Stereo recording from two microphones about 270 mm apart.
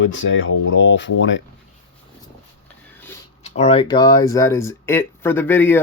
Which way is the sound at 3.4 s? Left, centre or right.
Left.